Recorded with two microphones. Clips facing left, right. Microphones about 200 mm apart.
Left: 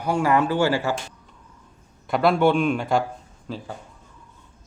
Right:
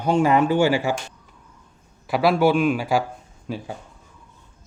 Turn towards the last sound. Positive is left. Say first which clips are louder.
# right 3 dB
turn(degrees=-15)  # may be behind; listen again after turning